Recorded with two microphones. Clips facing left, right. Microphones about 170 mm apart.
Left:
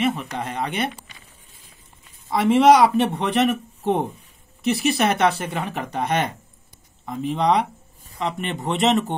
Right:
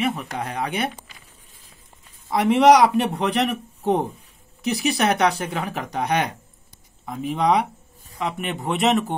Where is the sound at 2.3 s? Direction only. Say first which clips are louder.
Even; centre (ahead or behind).